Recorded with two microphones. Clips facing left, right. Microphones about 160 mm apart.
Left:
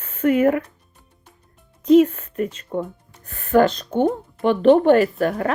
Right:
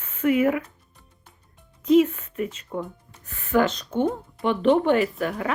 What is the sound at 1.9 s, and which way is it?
Speech, 40° left (ahead or behind).